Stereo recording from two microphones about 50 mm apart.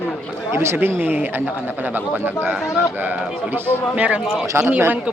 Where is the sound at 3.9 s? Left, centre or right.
Right.